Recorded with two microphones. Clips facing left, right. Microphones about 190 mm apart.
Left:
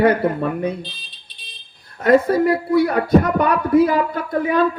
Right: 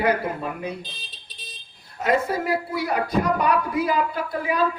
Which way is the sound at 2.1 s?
60° left (ahead or behind).